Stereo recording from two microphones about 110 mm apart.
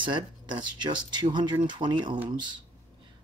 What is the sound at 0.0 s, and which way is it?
Speech, 45° right (ahead or behind).